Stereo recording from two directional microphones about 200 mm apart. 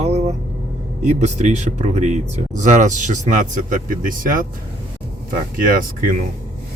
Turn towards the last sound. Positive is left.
turn(degrees=-45)  # may be behind; listen again after turning